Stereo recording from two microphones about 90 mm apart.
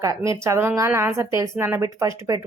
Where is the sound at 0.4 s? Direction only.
30° right (ahead or behind).